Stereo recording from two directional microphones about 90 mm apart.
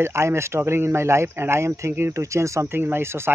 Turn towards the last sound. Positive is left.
turn(degrees=-25)  # may be behind; listen again after turning